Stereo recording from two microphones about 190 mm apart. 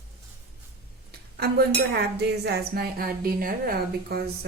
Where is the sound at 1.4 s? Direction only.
55° right (ahead or behind).